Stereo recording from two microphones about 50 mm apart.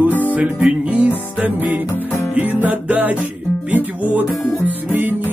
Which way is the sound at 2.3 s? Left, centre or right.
Right.